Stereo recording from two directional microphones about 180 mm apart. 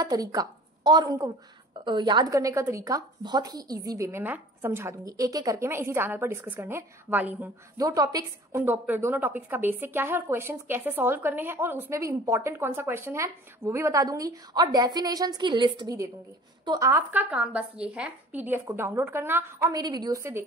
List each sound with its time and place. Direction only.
0.0 s a woman's voice: 20° right (ahead or behind)
7.7 s a woman's voice: 20° right (ahead or behind)